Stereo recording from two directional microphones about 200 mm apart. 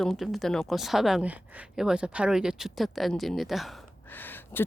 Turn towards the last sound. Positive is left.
turn(degrees=10)  # may be behind; listen again after turning